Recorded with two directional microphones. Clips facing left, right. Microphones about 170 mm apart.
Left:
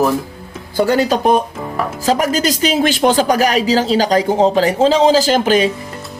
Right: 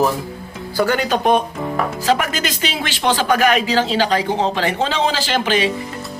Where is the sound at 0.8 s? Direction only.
35° left (ahead or behind).